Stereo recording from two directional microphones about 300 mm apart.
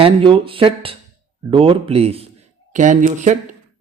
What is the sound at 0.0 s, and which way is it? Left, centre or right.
Speech, centre.